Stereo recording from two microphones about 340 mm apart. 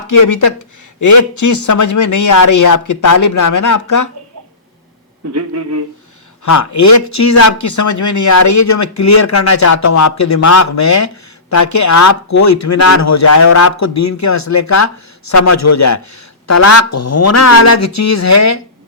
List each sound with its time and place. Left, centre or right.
0.1 s a man's voice: left
5.3 s a sound: right
6.4 s speech: left